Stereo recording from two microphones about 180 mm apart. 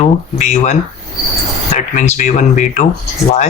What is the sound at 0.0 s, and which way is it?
Speech, 40° left (ahead or behind).